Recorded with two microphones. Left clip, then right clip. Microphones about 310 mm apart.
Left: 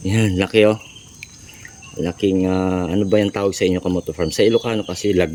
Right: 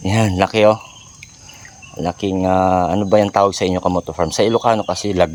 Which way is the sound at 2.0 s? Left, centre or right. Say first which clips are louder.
Even; centre.